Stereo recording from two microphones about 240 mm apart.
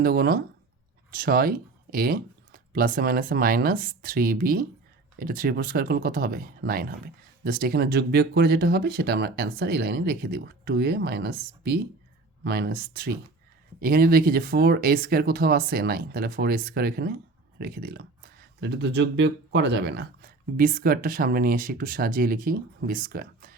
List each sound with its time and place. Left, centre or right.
0.0 s speech: right